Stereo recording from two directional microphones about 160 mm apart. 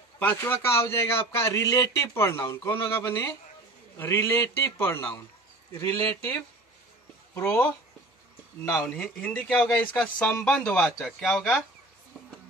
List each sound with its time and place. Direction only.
0.2 s a man's voice: 10° left (ahead or behind)
8.8 s a man's voice: 5° left (ahead or behind)